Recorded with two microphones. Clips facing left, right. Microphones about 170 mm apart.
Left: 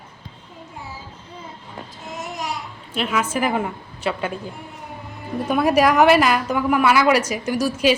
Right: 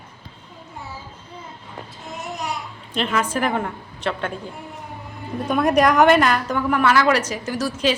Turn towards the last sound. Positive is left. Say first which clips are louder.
# left 3 dB
turn(degrees=10)  # may be behind; listen again after turning